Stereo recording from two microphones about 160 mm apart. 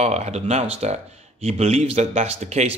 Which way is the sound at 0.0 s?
40° right (ahead or behind).